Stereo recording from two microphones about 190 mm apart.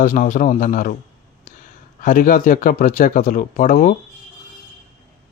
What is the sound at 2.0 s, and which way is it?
Speech, 45° left (ahead or behind).